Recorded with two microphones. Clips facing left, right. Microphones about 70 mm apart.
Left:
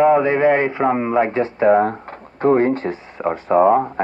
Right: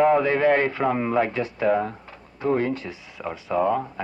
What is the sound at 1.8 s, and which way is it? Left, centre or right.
Speech, left.